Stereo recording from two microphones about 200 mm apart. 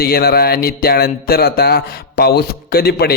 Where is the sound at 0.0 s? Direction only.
50° left (ahead or behind).